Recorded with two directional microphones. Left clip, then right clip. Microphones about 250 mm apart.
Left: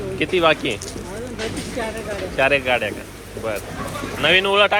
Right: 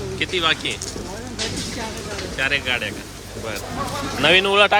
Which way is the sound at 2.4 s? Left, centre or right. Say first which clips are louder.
Left 4 dB; centre.